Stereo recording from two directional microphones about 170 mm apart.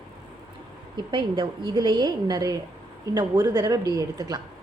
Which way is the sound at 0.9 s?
30° right (ahead or behind).